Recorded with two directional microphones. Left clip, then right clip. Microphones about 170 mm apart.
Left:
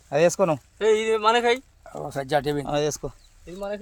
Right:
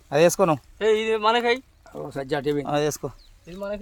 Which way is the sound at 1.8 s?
55° left (ahead or behind).